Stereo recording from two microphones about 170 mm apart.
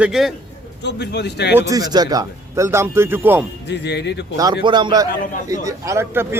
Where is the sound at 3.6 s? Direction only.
90° left.